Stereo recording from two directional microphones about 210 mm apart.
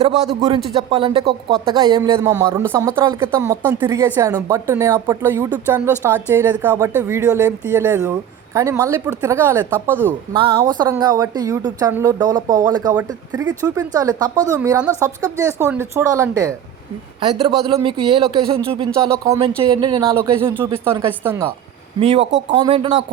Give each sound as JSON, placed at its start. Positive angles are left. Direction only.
{"t": 0.0, "sound": "a man's voice", "side_deg": -30}
{"t": 10.3, "sound": "speech", "side_deg": -20}
{"t": 22.0, "sound": "speech", "side_deg": -30}